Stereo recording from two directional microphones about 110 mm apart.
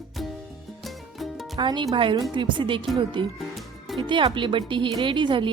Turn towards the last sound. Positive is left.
turn(degrees=-45)  # may be behind; listen again after turning